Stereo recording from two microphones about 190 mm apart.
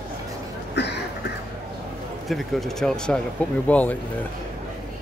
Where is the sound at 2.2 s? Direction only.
Centre (ahead or behind).